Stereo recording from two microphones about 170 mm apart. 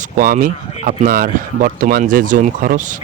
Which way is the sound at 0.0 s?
50° right (ahead or behind).